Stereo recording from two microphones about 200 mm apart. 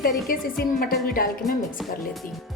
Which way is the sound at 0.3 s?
45° left (ahead or behind).